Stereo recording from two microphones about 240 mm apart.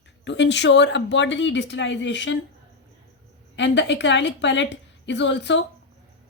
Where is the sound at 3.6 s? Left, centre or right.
Left.